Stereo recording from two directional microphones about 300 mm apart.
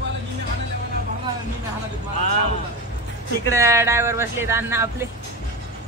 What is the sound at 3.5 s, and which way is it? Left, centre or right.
Speech, centre.